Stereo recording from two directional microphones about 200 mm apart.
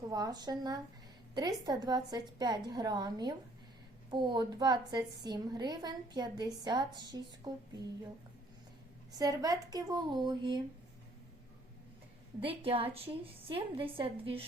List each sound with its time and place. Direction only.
0.1 s a woman's voice: 20° right (ahead or behind)
9.1 s a woman's voice: 20° right (ahead or behind)
12.5 s a woman's voice: 25° right (ahead or behind)